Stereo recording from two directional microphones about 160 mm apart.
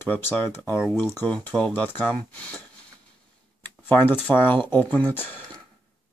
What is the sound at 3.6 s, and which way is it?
Speech, 10° left (ahead or behind).